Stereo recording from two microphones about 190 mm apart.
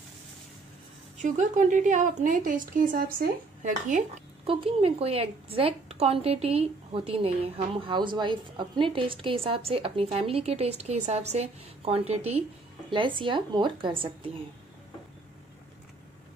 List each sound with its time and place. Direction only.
1.1 s a woman's voice: 40° right (ahead or behind)
4.5 s a woman's voice: 30° right (ahead or behind)